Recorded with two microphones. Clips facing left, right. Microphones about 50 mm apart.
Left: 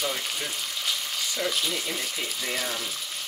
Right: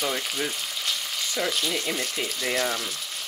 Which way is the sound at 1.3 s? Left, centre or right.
Centre.